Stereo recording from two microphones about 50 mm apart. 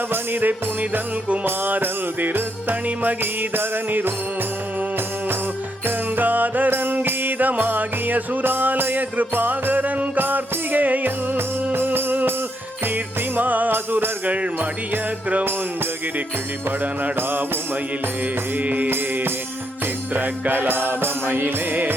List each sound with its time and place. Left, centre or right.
0.1 s music: right
5.8 s music: right
11.3 s music: right
12.8 s jingle bell: right
14.3 s jingle bell: right
17.2 s music: right
18.5 s music: right
18.9 s music: right